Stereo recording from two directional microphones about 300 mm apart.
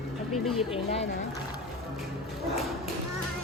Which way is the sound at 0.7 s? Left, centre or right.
Left.